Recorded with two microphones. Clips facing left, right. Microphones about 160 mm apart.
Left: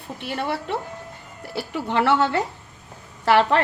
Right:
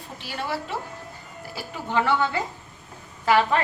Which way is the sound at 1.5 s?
75° left (ahead or behind).